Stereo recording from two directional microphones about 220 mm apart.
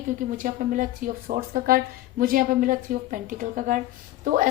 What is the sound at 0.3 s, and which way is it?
A woman's voice, 35° right (ahead or behind).